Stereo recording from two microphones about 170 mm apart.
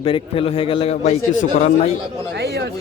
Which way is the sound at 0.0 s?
30° left (ahead or behind).